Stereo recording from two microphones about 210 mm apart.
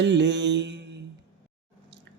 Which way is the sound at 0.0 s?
55° right (ahead or behind).